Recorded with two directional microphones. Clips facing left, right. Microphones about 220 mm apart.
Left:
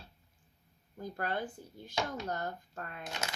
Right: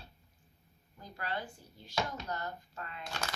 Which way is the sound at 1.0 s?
50° left (ahead or behind).